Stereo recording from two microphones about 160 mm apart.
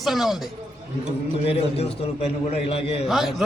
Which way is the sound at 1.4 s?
40° left (ahead or behind).